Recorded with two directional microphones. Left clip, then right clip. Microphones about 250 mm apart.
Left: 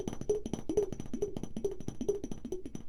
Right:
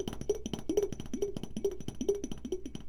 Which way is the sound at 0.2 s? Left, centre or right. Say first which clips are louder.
Left 3 dB; centre.